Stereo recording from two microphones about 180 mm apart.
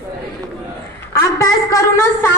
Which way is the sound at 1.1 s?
20° left (ahead or behind).